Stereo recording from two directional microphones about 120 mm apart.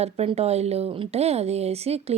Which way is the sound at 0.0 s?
60° right (ahead or behind).